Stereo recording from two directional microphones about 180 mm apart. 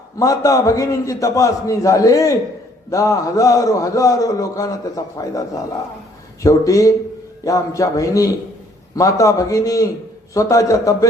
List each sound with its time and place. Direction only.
0.2 s a man's voice: 20° left (ahead or behind)